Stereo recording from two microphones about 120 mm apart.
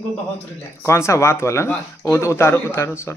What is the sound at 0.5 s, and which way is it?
Speech, 20° left (ahead or behind).